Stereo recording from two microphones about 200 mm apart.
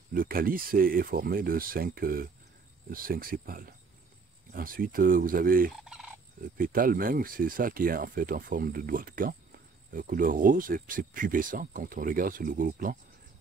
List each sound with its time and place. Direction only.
0.1 s speech: 45° right (ahead or behind)
5.7 s fowl: centre (ahead or behind)
6.6 s speech: 45° right (ahead or behind)